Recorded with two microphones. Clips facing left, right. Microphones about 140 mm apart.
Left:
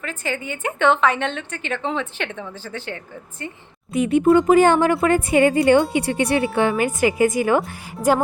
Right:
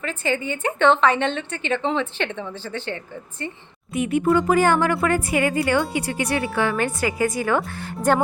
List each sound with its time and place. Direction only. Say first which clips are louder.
0.0 s a woman's voice: right 3 dB; 5° left (ahead or behind)
3.9 s a woman's voice: left 4 dB; 25° left (ahead or behind)
7.9 s a woman's voice: left 1 dB; 5° left (ahead or behind)